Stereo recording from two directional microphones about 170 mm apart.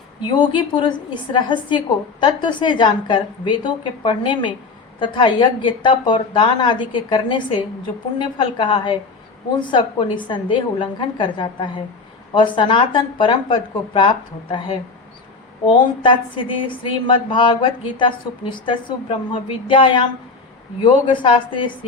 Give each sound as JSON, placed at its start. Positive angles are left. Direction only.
{"t": 0.3, "sound": "a woman's voice", "side_deg": 30}
{"t": 15.6, "sound": "a woman's voice", "side_deg": 30}